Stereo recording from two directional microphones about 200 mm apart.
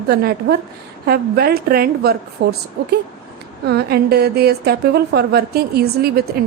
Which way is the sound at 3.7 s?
50° right (ahead or behind).